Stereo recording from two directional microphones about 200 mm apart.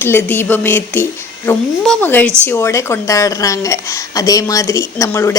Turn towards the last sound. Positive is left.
turn(degrees=15)  # may be behind; listen again after turning